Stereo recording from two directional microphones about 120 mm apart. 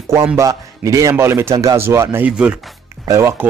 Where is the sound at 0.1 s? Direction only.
30° right (ahead or behind).